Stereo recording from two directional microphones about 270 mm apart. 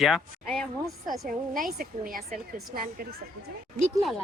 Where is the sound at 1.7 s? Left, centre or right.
Right.